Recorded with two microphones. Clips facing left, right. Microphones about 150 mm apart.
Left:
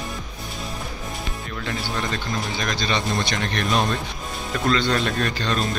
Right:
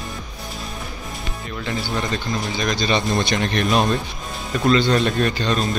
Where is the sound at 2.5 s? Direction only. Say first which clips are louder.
Right 6 dB; 5° right (ahead or behind).